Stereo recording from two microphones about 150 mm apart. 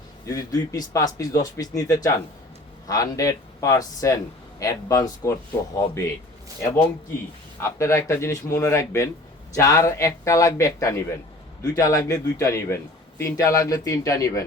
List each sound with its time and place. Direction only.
0.3 s a man's voice: 20° left (ahead or behind)
7.6 s a man's voice: 20° left (ahead or behind)